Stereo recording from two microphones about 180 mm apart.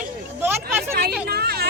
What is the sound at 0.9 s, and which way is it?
Speech, 60° right (ahead or behind).